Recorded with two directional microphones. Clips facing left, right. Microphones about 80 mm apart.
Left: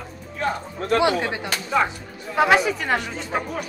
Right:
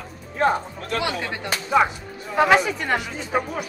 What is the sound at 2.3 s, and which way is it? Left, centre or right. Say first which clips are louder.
Speech: even; centre.